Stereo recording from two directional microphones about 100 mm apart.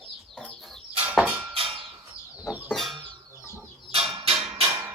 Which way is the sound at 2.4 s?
15° right (ahead or behind).